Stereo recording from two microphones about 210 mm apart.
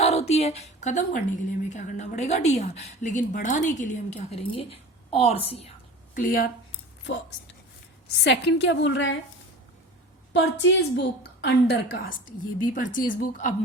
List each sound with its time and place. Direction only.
0.0 s a woman's voice: 30° left (ahead or behind)
6.1 s a woman's voice: 40° left (ahead or behind)
8.2 s a woman's voice: 55° left (ahead or behind)
10.3 s a woman's voice: 60° left (ahead or behind); by 13.5 s 40° left (ahead or behind)